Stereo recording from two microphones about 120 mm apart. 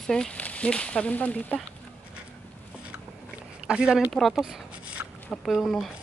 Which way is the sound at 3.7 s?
5° right (ahead or behind).